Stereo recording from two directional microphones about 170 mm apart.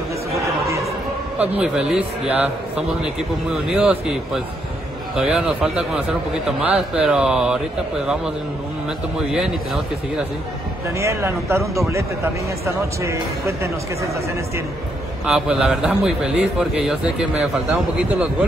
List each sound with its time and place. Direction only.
0.3 s chatter: 20° right (ahead or behind)
1.4 s a man's voice: 5° right (ahead or behind)
11.0 s speech: 15° right (ahead or behind)
12.6 s speech: 15° right (ahead or behind)
15.2 s a man's voice: 5° right (ahead or behind)